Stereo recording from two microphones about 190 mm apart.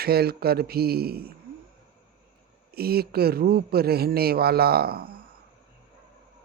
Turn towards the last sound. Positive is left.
turn(degrees=-55)  # may be behind; listen again after turning